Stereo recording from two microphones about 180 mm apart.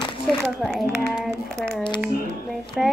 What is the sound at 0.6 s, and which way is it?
Speech, centre (ahead or behind).